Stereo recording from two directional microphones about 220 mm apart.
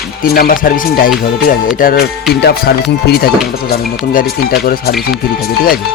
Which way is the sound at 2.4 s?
45° left (ahead or behind).